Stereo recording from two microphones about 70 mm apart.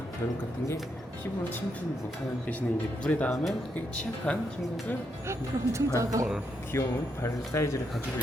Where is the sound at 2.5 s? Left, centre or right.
Left.